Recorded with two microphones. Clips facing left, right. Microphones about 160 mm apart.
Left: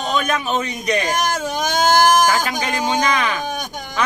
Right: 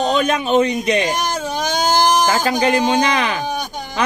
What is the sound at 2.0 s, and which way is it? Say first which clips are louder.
Sheep: left 1 dB; 50° left (ahead or behind).